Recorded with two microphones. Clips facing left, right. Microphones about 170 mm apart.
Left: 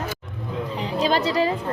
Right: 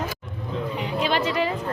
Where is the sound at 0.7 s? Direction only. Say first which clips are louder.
Left 3 dB; 35° left (ahead or behind).